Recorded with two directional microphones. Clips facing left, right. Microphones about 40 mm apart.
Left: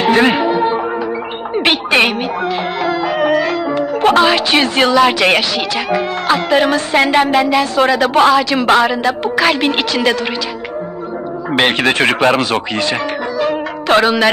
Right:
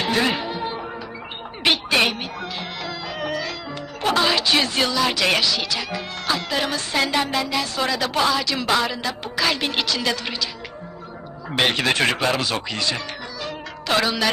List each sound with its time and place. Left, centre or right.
0.0 s music: left
1.5 s speech: left
11.5 s speech: left